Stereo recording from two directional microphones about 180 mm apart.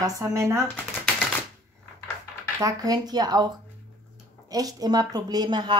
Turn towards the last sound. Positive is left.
turn(degrees=-25)  # may be behind; listen again after turning